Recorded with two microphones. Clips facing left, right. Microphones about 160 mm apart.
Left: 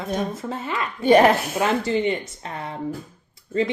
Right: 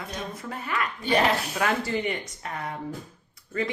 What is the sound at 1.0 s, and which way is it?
Speech, 45° left (ahead or behind).